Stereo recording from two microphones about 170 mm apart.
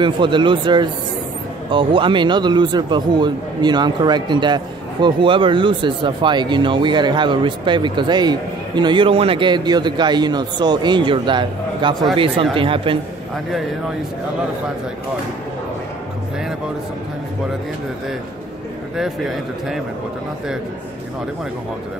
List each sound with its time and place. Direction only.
0.0 s speech: 30° right (ahead or behind)
18.9 s a man's voice: centre (ahead or behind)